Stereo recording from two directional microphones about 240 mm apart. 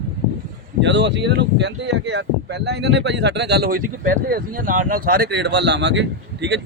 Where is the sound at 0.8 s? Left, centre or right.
Right.